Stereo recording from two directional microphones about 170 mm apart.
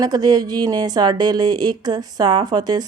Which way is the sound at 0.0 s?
25° right (ahead or behind).